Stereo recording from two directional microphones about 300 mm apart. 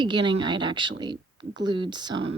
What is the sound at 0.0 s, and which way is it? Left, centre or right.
Speech, centre.